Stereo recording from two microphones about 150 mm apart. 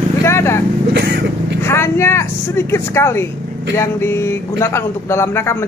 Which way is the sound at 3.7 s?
20° left (ahead or behind).